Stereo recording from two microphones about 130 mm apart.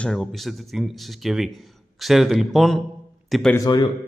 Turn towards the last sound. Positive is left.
turn(degrees=30)  # may be behind; listen again after turning